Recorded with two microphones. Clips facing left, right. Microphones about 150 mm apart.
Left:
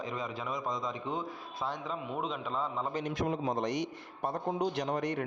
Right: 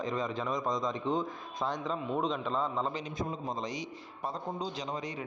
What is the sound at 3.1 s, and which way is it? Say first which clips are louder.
A man's voice: left 4 dB; 85° left.